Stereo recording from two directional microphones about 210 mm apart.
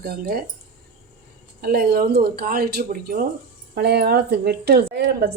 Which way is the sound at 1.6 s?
45° right (ahead or behind).